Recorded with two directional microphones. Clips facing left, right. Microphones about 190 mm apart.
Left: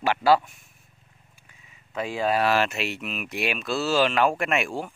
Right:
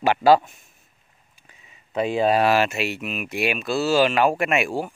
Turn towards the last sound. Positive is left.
turn(degrees=-5)  # may be behind; listen again after turning